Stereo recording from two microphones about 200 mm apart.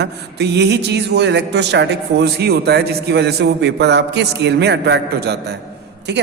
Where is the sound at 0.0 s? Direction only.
55° right (ahead or behind).